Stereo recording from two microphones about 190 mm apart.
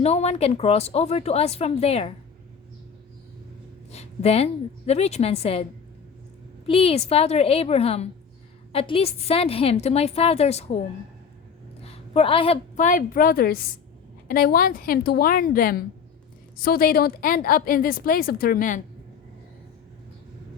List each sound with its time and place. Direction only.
0.0 s speech: 35° left (ahead or behind)
3.9 s a woman's voice: 35° left (ahead or behind)
6.7 s speech: 30° left (ahead or behind)
11.8 s a sound: 30° left (ahead or behind)
12.7 s a woman's voice: 45° left (ahead or behind)